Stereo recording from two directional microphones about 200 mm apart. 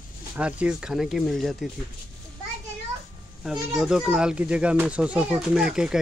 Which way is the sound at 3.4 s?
5° right (ahead or behind).